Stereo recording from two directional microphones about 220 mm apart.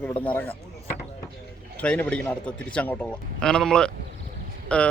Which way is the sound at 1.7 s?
5° left (ahead or behind).